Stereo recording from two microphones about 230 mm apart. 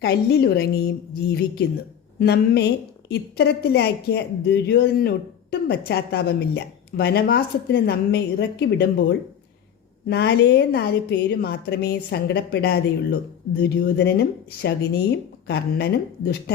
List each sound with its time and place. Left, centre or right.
0.0 s a woman's voice: left